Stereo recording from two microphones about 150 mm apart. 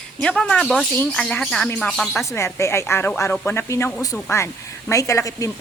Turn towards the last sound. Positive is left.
turn(degrees=20)  # may be behind; listen again after turning